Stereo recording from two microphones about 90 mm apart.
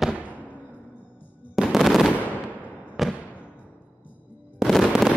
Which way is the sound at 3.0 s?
Centre (ahead or behind).